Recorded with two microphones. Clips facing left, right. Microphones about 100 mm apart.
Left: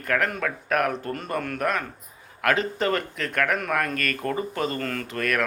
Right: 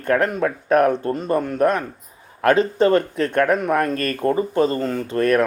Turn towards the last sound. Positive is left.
turn(degrees=-30)  # may be behind; listen again after turning